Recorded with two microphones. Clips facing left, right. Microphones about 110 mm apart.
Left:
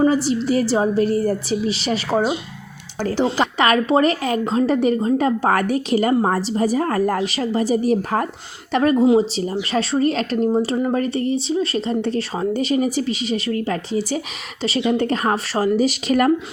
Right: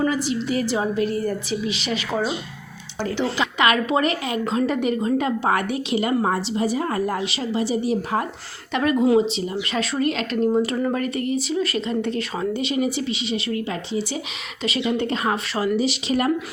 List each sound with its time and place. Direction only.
0.0 s a woman's voice: 35° left (ahead or behind)